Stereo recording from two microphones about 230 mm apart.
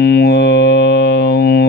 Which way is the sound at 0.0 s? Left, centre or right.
Left.